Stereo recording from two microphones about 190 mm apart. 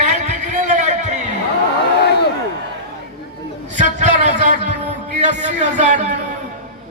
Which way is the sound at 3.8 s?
40° right (ahead or behind).